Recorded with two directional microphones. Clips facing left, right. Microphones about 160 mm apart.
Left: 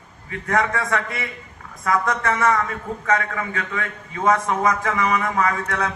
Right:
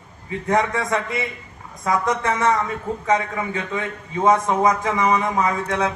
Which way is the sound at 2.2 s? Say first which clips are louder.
Even; 20° right (ahead or behind).